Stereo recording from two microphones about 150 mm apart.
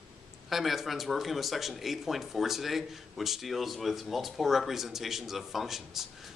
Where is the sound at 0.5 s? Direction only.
Centre (ahead or behind).